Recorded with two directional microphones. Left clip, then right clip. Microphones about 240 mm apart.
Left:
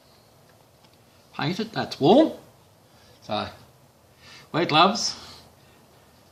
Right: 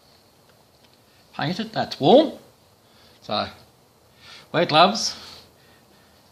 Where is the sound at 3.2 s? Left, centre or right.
Right.